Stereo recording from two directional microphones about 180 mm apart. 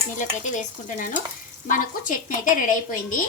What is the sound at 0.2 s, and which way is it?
A woman's voice, 45° left (ahead or behind).